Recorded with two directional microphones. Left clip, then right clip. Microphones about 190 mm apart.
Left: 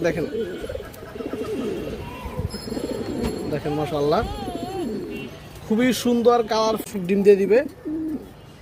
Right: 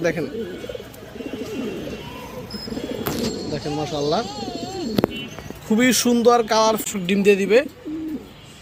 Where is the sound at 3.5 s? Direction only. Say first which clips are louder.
Left 3 dB; 5° left (ahead or behind).